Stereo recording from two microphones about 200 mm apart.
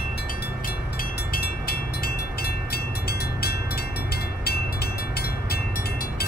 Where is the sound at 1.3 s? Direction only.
50° left (ahead or behind).